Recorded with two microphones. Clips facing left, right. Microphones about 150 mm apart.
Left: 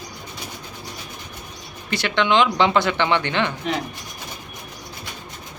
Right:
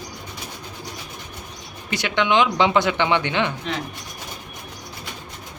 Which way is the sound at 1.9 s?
15° right (ahead or behind).